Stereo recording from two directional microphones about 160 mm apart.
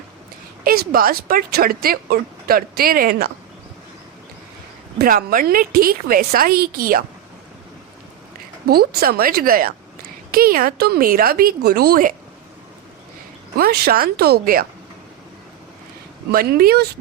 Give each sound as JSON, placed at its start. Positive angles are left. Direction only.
{"t": 0.6, "sound": "speech", "side_deg": -65}
{"t": 4.9, "sound": "a woman's voice", "side_deg": -60}
{"t": 8.7, "sound": "speech", "side_deg": -75}
{"t": 13.6, "sound": "speech", "side_deg": -75}
{"t": 16.3, "sound": "speech", "side_deg": -70}